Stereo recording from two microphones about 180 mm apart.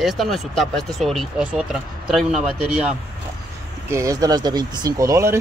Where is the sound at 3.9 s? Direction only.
15° right (ahead or behind).